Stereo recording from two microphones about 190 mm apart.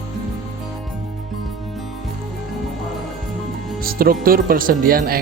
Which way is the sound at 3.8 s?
50° right (ahead or behind).